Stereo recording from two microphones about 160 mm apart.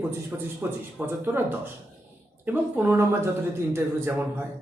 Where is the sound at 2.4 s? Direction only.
10° right (ahead or behind).